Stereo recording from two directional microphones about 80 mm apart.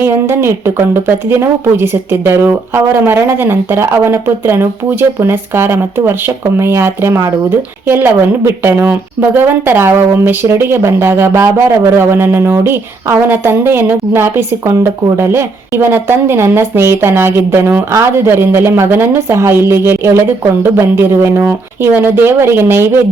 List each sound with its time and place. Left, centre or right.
0.0 s a woman's voice: right